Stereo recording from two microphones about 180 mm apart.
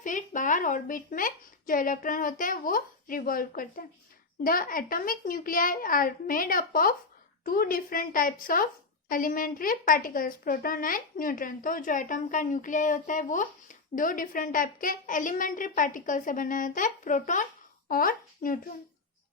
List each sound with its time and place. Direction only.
0.0 s a woman's voice: 45° left (ahead or behind)